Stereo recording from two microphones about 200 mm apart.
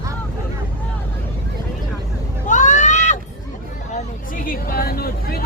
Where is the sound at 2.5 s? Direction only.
40° left (ahead or behind).